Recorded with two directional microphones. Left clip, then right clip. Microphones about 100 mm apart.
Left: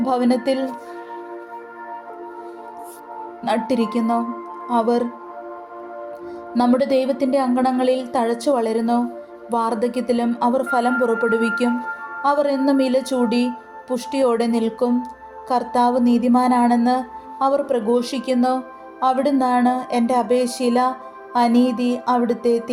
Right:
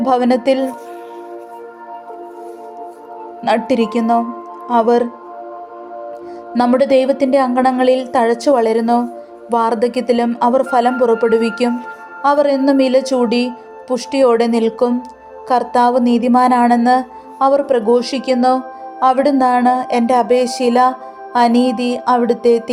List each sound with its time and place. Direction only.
0.0 s a woman's voice: 30° right (ahead or behind)
3.4 s a woman's voice: 30° right (ahead or behind)
6.5 s a woman's voice: 30° right (ahead or behind)